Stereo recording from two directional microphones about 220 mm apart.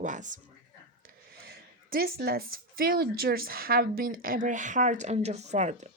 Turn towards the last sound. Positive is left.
turn(degrees=-30)  # may be behind; listen again after turning